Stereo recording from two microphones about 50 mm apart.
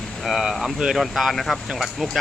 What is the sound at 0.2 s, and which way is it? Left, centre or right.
Speech, centre.